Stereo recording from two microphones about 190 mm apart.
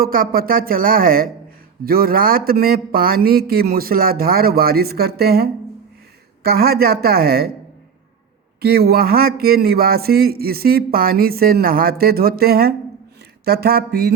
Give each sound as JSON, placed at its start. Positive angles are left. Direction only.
{"t": 0.0, "sound": "speech", "side_deg": -50}
{"t": 8.6, "sound": "speech", "side_deg": -55}
{"t": 13.4, "sound": "a sound", "side_deg": -55}